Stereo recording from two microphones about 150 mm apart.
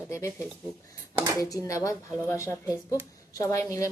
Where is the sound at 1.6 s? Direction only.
20° left (ahead or behind).